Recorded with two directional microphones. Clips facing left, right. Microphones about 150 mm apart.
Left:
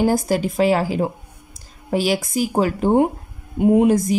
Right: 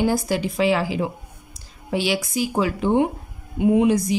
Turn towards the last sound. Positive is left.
turn(degrees=45)  # may be behind; listen again after turning